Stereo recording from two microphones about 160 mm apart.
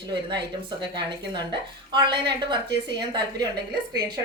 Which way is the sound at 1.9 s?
30° right (ahead or behind).